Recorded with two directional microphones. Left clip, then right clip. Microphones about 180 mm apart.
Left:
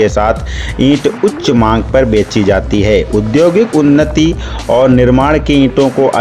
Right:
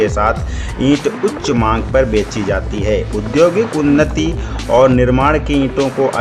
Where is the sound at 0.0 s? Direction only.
30° left (ahead or behind).